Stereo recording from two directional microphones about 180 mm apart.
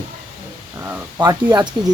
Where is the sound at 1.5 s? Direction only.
20° right (ahead or behind).